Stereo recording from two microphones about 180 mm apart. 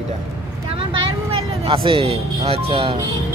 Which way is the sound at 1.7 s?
30° right (ahead or behind).